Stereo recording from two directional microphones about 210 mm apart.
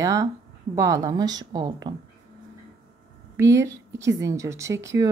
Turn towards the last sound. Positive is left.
turn(degrees=-15)  # may be behind; listen again after turning